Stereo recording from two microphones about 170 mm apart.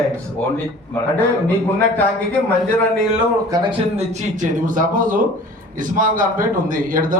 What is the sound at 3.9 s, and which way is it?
A man's voice, 45° right (ahead or behind).